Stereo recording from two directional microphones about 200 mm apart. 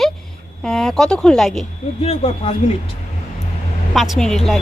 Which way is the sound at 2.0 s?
30° left (ahead or behind).